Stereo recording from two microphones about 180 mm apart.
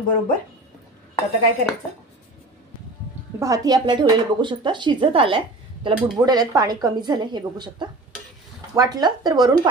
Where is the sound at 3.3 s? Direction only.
20° right (ahead or behind).